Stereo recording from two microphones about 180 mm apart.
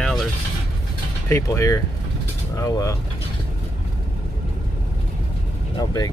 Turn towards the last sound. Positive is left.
turn(degrees=20)  # may be behind; listen again after turning